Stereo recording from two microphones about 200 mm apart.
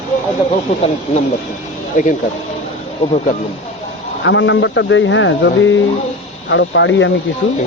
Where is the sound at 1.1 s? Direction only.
30° left (ahead or behind).